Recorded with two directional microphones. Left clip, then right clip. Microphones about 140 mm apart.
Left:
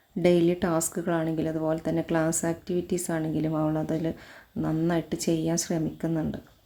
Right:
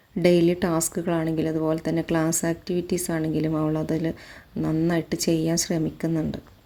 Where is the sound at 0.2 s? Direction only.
20° right (ahead or behind).